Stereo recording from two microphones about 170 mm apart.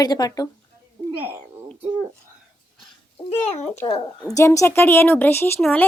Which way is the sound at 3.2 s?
40° left (ahead or behind).